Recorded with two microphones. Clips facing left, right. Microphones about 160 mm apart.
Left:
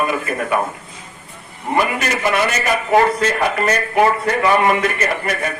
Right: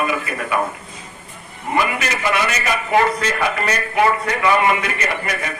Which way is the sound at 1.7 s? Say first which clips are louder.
Left 2 dB; 45° left (ahead or behind).